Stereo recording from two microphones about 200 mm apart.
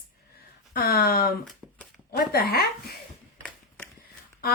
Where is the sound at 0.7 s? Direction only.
50° left (ahead or behind).